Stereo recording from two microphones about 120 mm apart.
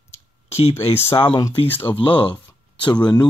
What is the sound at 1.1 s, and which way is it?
Speech, 45° left (ahead or behind).